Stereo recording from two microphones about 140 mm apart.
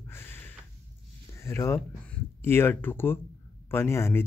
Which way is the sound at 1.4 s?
20° left (ahead or behind).